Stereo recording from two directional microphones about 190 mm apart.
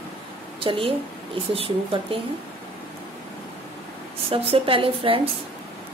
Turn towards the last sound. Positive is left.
turn(degrees=-30)  # may be behind; listen again after turning